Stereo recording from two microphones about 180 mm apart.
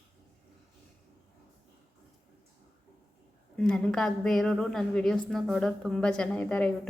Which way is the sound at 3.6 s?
5° left (ahead or behind).